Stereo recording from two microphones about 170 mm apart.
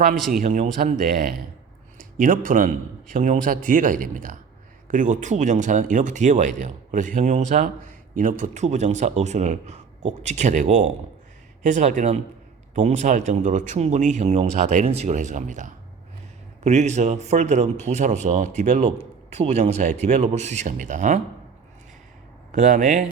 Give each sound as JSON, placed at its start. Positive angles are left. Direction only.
{"t": 0.4, "sound": "speech", "side_deg": -40}
{"t": 0.8, "sound": "speech", "side_deg": -55}
{"t": 22.5, "sound": "speech", "side_deg": -45}